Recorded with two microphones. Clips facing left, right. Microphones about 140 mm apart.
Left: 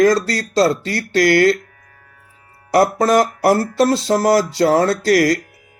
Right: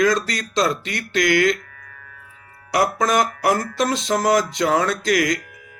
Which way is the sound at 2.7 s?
40° left (ahead or behind).